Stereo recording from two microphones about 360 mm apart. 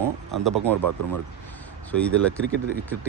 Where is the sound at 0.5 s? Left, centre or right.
Right.